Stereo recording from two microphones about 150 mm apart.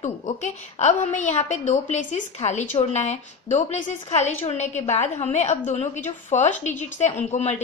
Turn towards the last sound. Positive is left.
turn(degrees=50)  # may be behind; listen again after turning